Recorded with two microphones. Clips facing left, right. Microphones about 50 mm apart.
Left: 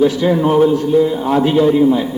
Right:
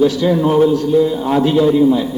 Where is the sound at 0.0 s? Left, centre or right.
Left.